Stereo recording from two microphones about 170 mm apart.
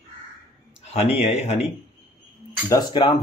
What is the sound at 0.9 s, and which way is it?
Speech, 40° left (ahead or behind).